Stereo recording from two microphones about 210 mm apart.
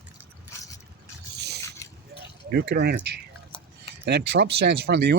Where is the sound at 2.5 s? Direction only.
50° right (ahead or behind).